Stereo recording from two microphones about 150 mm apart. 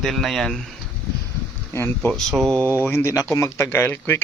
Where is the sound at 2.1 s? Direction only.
Centre (ahead or behind).